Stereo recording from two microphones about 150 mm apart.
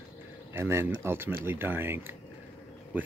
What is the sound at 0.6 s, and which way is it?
Speech, 15° right (ahead or behind).